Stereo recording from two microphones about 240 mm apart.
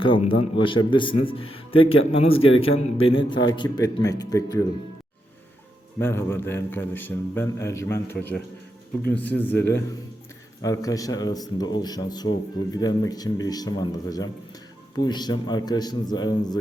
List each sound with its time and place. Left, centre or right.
0.0 s a man's voice: left
6.0 s speech: centre